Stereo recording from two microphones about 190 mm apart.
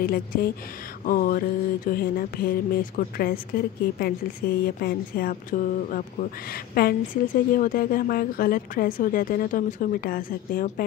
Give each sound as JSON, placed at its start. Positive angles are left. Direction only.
{"t": 0.0, "sound": "a woman's voice", "side_deg": 50}